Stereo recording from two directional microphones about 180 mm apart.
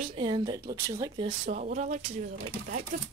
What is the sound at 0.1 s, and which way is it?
Speech, 25° right (ahead or behind).